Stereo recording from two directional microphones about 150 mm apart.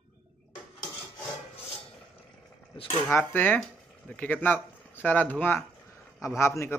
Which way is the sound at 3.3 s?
10° left (ahead or behind).